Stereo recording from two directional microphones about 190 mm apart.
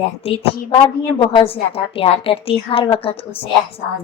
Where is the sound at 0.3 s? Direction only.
30° left (ahead or behind).